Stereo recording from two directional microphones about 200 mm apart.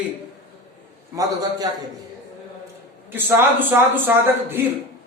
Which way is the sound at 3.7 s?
10° right (ahead or behind).